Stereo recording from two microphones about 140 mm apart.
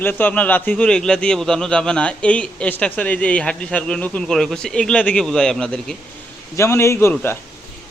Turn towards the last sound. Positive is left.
turn(degrees=15)  # may be behind; listen again after turning